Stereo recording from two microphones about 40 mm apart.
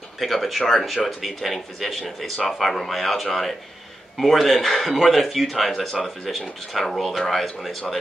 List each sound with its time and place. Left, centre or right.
0.2 s speech: centre